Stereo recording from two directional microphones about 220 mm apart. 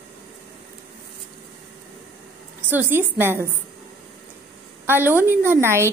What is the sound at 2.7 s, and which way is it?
Speech, 10° right (ahead or behind).